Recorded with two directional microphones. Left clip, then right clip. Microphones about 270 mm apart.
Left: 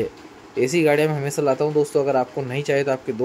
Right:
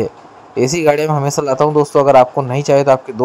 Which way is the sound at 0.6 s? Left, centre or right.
Centre.